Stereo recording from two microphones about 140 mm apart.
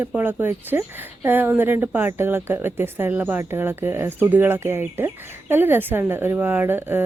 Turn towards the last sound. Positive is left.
turn(degrees=-15)  # may be behind; listen again after turning